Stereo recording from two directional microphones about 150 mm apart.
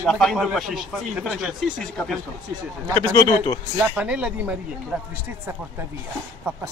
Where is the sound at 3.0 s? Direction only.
25° left (ahead or behind).